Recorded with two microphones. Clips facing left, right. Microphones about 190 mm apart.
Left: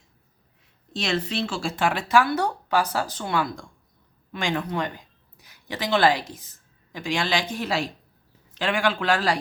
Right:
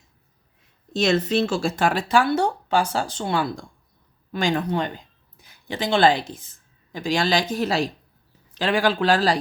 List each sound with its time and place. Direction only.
0.9 s speech: 40° right (ahead or behind)